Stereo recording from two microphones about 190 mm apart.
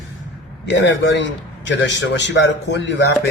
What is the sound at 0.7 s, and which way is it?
A man's voice, 70° left (ahead or behind).